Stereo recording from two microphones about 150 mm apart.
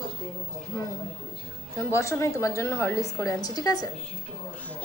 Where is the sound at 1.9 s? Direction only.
20° left (ahead or behind).